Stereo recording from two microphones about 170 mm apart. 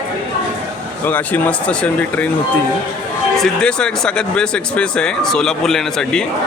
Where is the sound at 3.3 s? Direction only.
5° left (ahead or behind).